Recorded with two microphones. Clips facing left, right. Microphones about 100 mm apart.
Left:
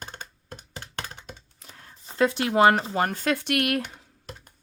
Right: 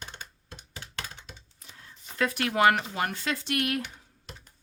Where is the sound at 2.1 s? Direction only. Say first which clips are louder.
Left 5 dB; 30° left (ahead or behind); by 3.9 s 65° left (ahead or behind).